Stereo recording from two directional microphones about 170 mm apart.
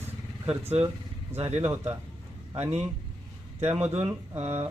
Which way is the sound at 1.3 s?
40° right (ahead or behind).